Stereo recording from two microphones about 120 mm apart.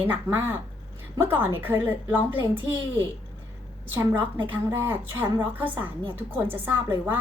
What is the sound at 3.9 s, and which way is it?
A woman's voice, 15° right (ahead or behind).